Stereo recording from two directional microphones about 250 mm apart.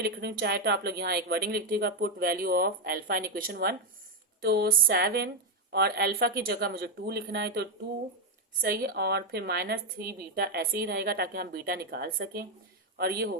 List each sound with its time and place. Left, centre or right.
0.0 s a woman's voice: right